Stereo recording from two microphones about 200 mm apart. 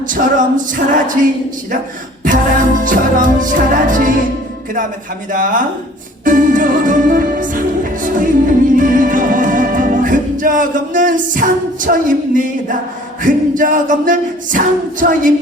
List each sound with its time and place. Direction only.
0.1 s singing: 40° right (ahead or behind)
2.2 s singing: 40° right (ahead or behind)
5.3 s singing: 40° right (ahead or behind)
6.2 s music: 40° right (ahead or behind)
13.2 s singing: 40° right (ahead or behind)